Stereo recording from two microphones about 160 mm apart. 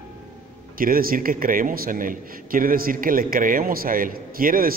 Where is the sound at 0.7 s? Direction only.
65° right (ahead or behind).